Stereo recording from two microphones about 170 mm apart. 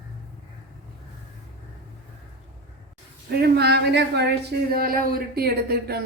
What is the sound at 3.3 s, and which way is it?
Speech, 70° right (ahead or behind).